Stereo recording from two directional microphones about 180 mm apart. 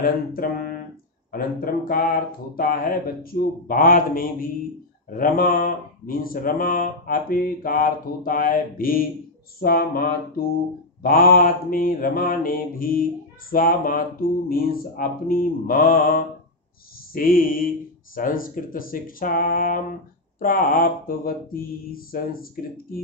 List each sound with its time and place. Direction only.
0.0 s speech: 55° left (ahead or behind)
9.6 s mantra: 55° left (ahead or behind)
11.0 s speech: 55° left (ahead or behind)